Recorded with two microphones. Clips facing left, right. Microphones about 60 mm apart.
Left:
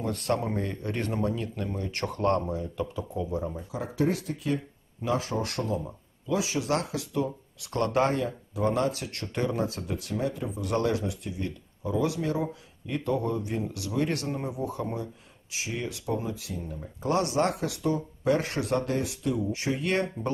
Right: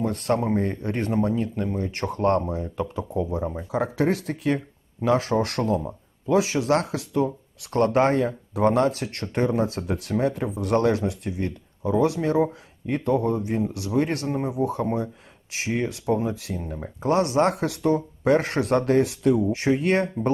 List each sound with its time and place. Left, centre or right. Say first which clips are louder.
0.0 s speech: right 5 dB; right
3.7 s speech: right 5 dB; right
17.0 s speech: right 5 dB; right